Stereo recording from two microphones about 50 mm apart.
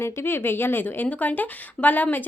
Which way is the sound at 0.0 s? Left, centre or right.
Left.